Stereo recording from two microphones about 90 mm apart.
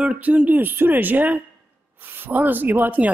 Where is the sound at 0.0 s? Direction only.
15° right (ahead or behind).